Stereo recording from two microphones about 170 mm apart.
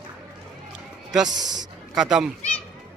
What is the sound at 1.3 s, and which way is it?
Speech, 25° right (ahead or behind).